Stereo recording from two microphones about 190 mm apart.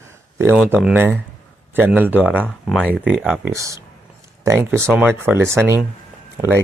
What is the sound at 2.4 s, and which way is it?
Speech, 5° left (ahead or behind).